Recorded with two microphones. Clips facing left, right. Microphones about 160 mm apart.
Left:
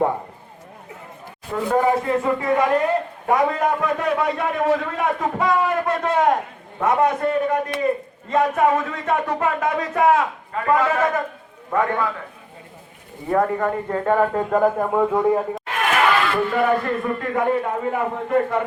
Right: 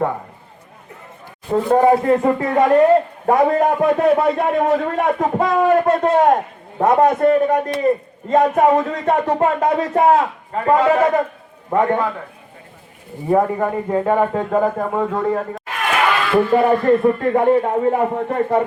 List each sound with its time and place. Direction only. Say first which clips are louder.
1.5 s a man's voice: right 6 dB; 35° right (ahead or behind)
13.3 s speech: right 3 dB; 15° right (ahead or behind)
14.1 s a man's voice: left 1 dB; 5° right (ahead or behind)
15.0 s a man's voice: left 1 dB; 10° left (ahead or behind)
16.5 s speech: right 6 dB; 35° right (ahead or behind)